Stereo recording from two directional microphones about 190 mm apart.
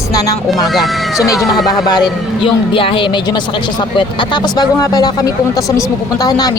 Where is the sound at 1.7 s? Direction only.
20° left (ahead or behind).